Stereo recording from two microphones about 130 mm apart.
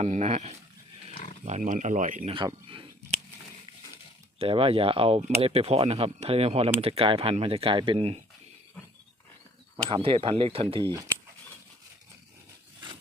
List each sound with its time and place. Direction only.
0.0 s speech: 60° right (ahead or behind)
1.1 s pig: 80° left
1.5 s speech: 70° right (ahead or behind)
2.2 s speech: 40° right (ahead or behind)
4.4 s speech: 45° right (ahead or behind)
9.9 s speech: 45° right (ahead or behind)